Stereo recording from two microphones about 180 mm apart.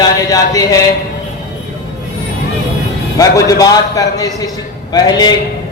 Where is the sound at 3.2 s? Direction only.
20° left (ahead or behind).